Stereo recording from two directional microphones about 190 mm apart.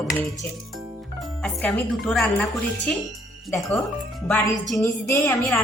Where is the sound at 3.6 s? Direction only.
Centre (ahead or behind).